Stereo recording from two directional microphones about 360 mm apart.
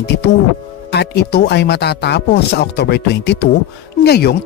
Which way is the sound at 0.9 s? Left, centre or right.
Left.